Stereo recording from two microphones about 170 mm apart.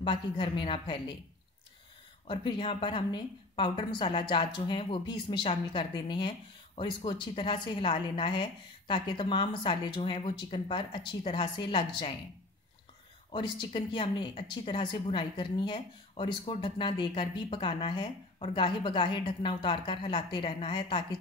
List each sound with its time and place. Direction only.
0.0 s a woman's voice: 30° left (ahead or behind)
2.2 s a woman's voice: 30° left (ahead or behind)
13.3 s a woman's voice: 30° left (ahead or behind)